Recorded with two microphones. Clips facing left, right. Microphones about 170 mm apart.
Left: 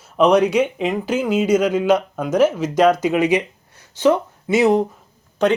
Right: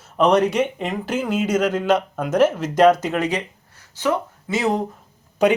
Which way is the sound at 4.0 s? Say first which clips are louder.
Left 6 dB; 20° left (ahead or behind).